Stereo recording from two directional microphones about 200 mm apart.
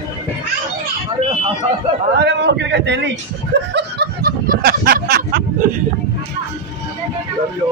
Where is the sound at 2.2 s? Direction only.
55° right (ahead or behind).